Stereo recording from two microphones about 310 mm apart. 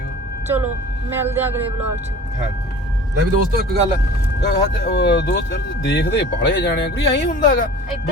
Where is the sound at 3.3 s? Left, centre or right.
Right.